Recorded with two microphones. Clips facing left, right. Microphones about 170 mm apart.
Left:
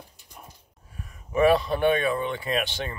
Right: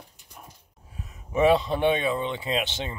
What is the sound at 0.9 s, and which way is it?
Speech, 20° right (ahead or behind).